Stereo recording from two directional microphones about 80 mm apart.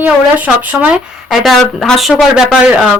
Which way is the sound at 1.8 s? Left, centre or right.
Centre.